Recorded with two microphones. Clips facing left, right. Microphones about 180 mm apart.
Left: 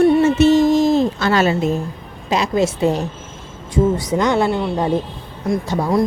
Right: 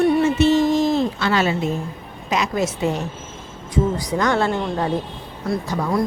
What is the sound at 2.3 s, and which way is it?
Speech, 30° left (ahead or behind).